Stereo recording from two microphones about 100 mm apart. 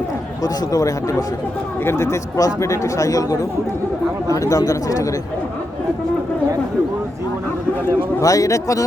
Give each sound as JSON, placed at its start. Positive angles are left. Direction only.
{"t": 0.4, "sound": "speech", "side_deg": 35}
{"t": 1.8, "sound": "speech", "side_deg": 25}
{"t": 8.2, "sound": "speech", "side_deg": 35}